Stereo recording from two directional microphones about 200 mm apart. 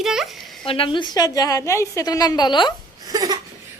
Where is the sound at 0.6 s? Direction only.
25° left (ahead or behind).